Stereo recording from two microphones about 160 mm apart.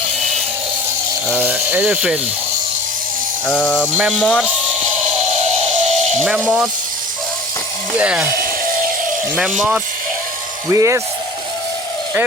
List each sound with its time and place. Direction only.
1.3 s speech: 10° right (ahead or behind)
3.4 s speech: 5° left (ahead or behind)
3.9 s speech: 5° right (ahead or behind)
5.9 s a sound: 45° right (ahead or behind)
6.2 s speech: 5° right (ahead or behind)
7.9 s speech: 10° right (ahead or behind)
10.7 s speech: 20° right (ahead or behind)